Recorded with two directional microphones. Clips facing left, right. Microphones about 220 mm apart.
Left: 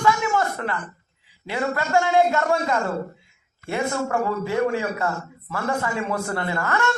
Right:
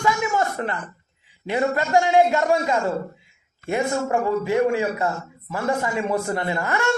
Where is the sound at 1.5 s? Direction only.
20° right (ahead or behind).